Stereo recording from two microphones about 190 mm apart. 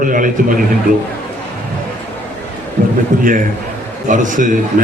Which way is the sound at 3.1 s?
45° right (ahead or behind).